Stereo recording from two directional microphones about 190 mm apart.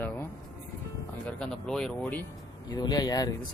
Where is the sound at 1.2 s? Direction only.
5° left (ahead or behind).